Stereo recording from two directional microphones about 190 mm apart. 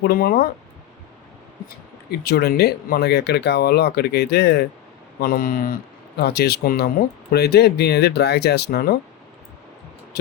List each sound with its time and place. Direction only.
0.0 s speech: 55° left (ahead or behind)
2.0 s speech: 55° left (ahead or behind)